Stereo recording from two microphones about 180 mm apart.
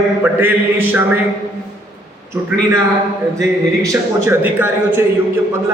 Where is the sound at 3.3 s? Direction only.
20° right (ahead or behind).